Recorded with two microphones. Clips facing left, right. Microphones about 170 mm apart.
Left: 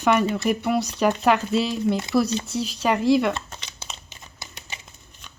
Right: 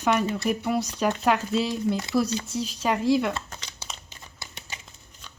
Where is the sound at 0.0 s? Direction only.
70° left (ahead or behind).